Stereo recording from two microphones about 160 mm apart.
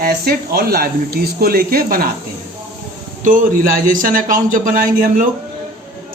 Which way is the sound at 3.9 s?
60° right (ahead or behind).